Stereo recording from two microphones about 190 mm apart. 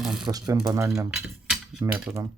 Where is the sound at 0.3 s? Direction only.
20° right (ahead or behind).